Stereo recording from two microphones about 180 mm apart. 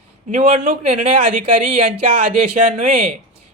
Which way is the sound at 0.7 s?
35° right (ahead or behind).